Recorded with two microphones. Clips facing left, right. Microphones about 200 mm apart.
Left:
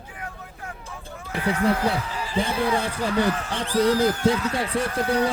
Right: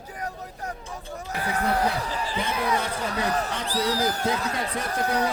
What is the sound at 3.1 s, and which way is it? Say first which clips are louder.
Speech: left 4 dB; 35° right (ahead or behind).